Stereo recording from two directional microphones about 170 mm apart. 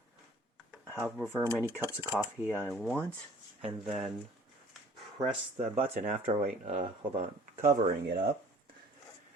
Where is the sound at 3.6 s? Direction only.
40° right (ahead or behind).